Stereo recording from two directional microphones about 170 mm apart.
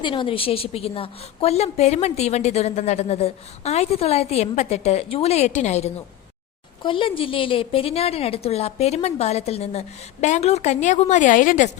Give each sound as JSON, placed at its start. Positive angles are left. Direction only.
{"t": 0.0, "sound": "a woman's voice", "side_deg": 30}
{"t": 6.8, "sound": "a woman's voice", "side_deg": 30}